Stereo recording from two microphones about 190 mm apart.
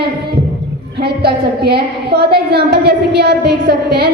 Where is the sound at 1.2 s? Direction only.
55° right (ahead or behind).